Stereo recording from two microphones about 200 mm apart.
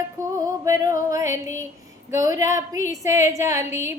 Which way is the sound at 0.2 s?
15° right (ahead or behind).